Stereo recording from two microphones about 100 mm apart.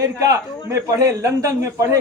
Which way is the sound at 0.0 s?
35° right (ahead or behind).